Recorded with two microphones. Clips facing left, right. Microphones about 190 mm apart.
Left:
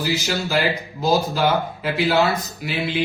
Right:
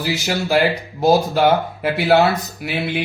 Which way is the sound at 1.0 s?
60° right (ahead or behind).